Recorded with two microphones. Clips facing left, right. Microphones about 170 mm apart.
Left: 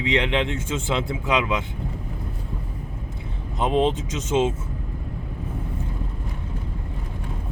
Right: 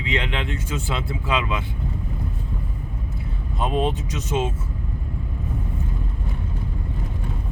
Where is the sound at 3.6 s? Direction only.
20° left (ahead or behind).